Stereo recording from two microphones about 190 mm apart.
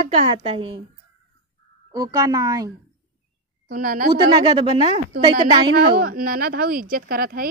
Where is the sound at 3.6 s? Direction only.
50° right (ahead or behind).